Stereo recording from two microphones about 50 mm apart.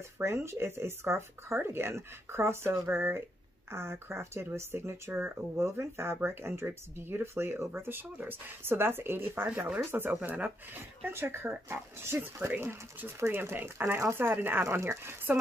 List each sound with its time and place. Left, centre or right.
0.2 s speech: right
2.9 s speech: right